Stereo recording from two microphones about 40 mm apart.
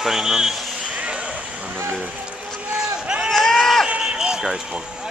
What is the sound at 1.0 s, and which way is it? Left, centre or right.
Vehicle, right.